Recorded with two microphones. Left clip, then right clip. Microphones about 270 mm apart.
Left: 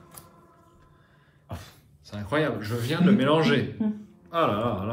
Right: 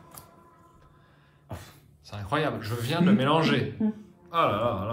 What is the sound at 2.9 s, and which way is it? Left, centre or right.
A man's voice, centre.